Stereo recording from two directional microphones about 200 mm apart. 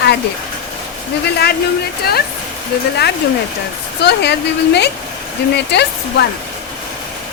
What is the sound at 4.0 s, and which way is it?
Speech, 55° left (ahead or behind).